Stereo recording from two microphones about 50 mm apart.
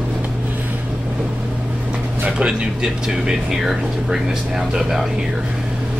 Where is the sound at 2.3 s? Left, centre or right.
Centre.